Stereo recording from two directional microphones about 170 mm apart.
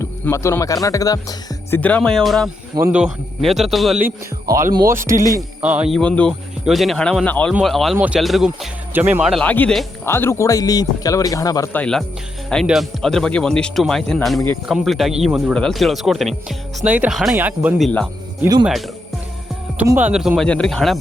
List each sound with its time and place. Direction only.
0.0 s speech: 15° left (ahead or behind)
1.8 s speech: 5° left (ahead or behind)
4.0 s speech: 20° right (ahead or behind)
6.0 s speech: 5° left (ahead or behind)
11.7 s speech: 5° left (ahead or behind)
19.7 s speech: 10° right (ahead or behind)